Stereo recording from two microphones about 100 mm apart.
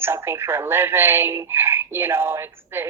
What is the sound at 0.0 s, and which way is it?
A woman's voice, 25° right (ahead or behind).